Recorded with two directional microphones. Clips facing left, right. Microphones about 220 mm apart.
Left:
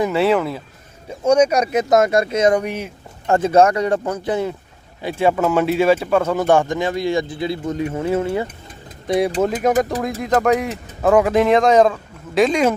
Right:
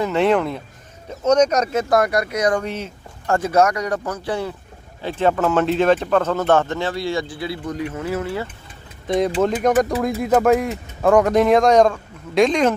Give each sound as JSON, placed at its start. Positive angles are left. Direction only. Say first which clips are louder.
{"t": 0.0, "sound": "speech", "louder": "left 1 dB", "side_deg": 5}
{"t": 9.4, "sound": "speech", "louder": "even", "side_deg": 5}